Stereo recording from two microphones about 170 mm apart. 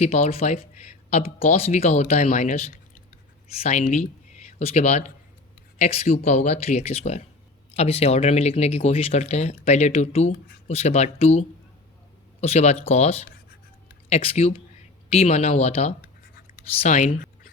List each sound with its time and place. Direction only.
0.0 s speech: 40° left (ahead or behind)